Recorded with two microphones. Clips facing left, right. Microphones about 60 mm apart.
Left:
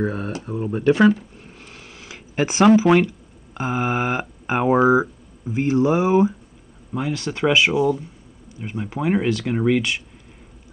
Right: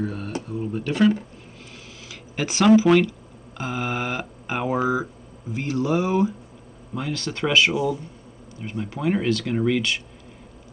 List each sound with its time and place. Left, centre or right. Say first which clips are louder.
0.0 s speech: left 4 dB; left
1.6 s a sound: left 1 dB; left
2.9 s speech: left 1 dB; left